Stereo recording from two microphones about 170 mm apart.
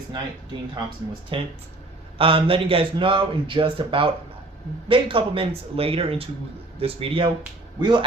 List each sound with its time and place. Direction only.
1.3 s speech: 30° right (ahead or behind)